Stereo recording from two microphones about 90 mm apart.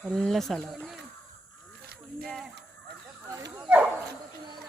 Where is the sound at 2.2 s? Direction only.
5° left (ahead or behind).